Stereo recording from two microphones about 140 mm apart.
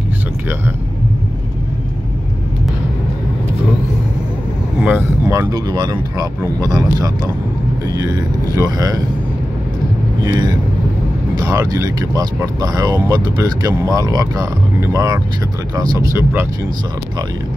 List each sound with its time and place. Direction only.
4.8 s speech: 15° right (ahead or behind)
8.5 s speech: 25° right (ahead or behind)
10.2 s speech: 30° right (ahead or behind)